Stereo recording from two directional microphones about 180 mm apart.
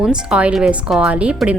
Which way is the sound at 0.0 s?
5° right (ahead or behind).